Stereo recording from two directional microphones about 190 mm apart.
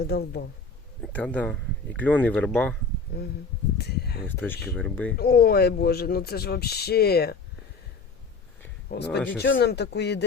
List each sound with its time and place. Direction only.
0.0 s speech: 55° left (ahead or behind)
1.0 s speech: 5° left (ahead or behind)
3.1 s speech: 60° left (ahead or behind)
4.3 s speech: 10° left (ahead or behind)
5.1 s speech: 55° left (ahead or behind)
8.9 s speech: 60° left (ahead or behind)